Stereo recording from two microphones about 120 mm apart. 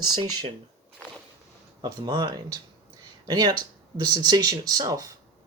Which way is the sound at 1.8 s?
35° right (ahead or behind).